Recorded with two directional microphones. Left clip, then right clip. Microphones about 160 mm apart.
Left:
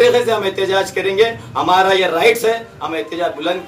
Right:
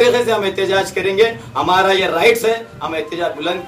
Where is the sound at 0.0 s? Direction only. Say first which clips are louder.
Left 1 dB; centre (ahead or behind).